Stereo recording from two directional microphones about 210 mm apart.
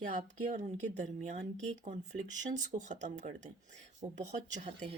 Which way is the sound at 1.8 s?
35° right (ahead or behind).